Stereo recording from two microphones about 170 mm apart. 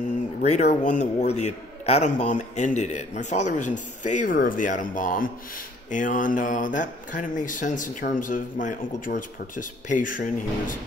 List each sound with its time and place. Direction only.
0.4 s a man's voice: 40° left (ahead or behind)